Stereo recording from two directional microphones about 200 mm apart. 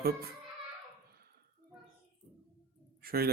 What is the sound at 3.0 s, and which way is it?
Speech, 50° right (ahead or behind).